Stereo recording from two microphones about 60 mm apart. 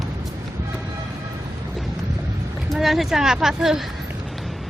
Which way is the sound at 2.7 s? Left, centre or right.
Centre.